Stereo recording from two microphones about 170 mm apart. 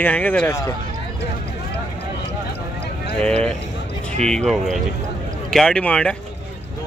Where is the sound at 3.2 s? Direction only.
5° left (ahead or behind).